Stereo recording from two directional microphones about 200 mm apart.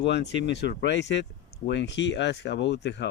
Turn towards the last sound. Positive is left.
turn(degrees=60)  # may be behind; listen again after turning